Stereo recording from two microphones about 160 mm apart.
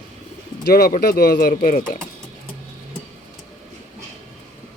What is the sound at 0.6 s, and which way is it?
Speech, 75° left (ahead or behind).